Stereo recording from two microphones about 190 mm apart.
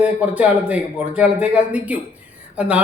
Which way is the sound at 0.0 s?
5° right (ahead or behind).